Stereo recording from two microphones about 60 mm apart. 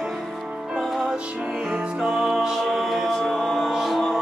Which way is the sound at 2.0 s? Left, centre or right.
Centre.